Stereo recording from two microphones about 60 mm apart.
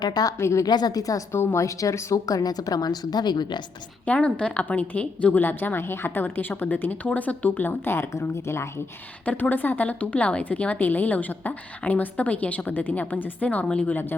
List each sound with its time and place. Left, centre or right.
0.3 s speech: left
0.6 s a woman's voice: left
1.5 s speech: left
4.0 s a woman's voice: left
5.4 s a woman's voice: left
7.9 s speech: left
9.2 s a woman's voice: left
13.9 s a woman's voice: left